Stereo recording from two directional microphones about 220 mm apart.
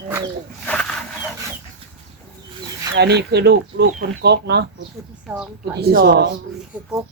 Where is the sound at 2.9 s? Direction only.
50° right (ahead or behind).